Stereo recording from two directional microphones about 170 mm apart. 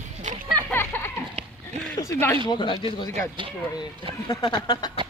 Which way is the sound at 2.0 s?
15° left (ahead or behind).